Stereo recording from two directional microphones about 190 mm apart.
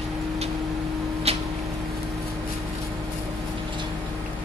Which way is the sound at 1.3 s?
30° right (ahead or behind).